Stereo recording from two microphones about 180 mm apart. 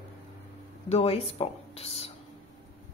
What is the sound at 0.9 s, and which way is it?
Speech, 35° left (ahead or behind).